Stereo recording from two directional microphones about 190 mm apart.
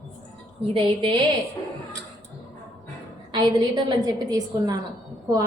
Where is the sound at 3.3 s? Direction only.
25° right (ahead or behind).